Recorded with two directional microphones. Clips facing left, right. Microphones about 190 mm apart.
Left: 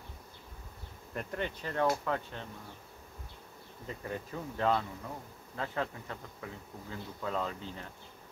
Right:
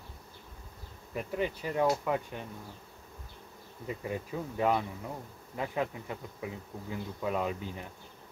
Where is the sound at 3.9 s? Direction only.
10° right (ahead or behind).